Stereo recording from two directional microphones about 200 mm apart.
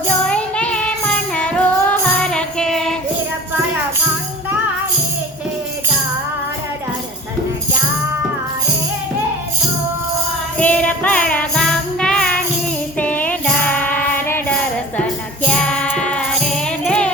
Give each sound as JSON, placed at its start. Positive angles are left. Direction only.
{"t": 0.3, "sound": "music", "side_deg": 5}
{"t": 10.6, "sound": "music", "side_deg": 5}